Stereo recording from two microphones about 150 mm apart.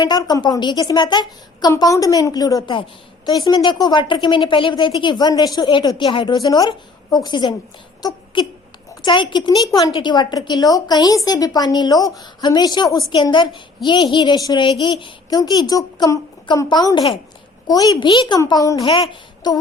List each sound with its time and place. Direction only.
0.0 s a woman's voice: 25° left (ahead or behind)